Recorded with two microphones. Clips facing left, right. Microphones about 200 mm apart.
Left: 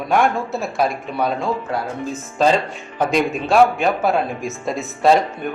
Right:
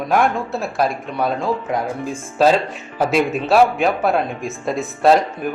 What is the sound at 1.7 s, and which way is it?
A man's voice, 15° right (ahead or behind).